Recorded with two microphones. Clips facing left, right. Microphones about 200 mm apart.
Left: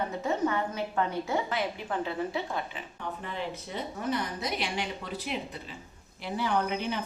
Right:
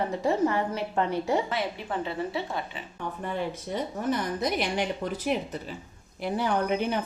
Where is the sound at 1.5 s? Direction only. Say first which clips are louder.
Right 1 dB; centre (ahead or behind).